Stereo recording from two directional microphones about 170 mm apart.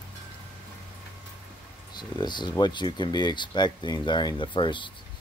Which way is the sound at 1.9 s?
25° left (ahead or behind).